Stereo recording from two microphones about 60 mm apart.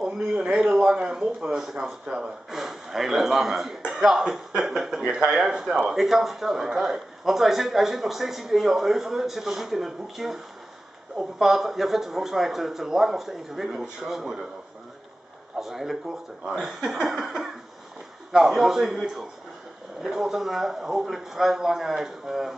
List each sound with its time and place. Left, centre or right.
0.0 s speech: centre
15.6 s speech: centre